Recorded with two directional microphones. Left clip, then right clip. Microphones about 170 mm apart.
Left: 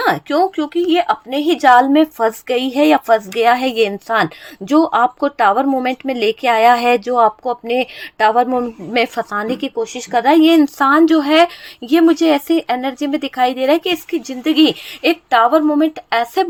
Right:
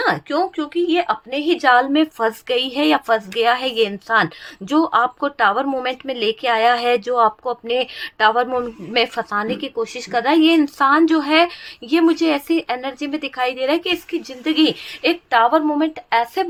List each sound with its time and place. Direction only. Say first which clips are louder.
0.0 s a woman's voice: left 4 dB; 30° left (ahead or behind)